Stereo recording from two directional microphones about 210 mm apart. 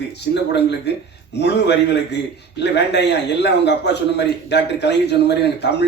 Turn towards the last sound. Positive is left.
turn(degrees=55)  # may be behind; listen again after turning